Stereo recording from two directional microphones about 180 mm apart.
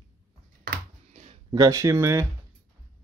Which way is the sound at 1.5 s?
20° right (ahead or behind).